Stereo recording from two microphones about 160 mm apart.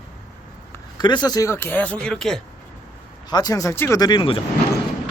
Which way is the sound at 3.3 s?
25° left (ahead or behind).